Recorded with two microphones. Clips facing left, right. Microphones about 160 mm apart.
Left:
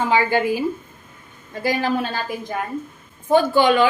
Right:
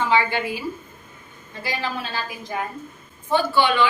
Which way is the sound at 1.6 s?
50° left (ahead or behind).